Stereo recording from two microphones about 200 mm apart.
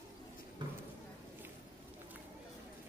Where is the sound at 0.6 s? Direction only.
25° right (ahead or behind).